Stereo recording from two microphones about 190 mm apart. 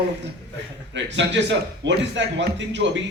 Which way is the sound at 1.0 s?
70° right (ahead or behind).